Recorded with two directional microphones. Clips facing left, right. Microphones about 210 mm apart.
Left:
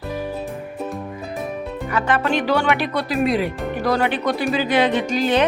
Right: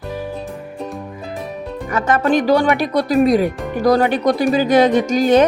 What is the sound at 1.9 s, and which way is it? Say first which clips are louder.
Speech: right 5 dB; 45° right (ahead or behind).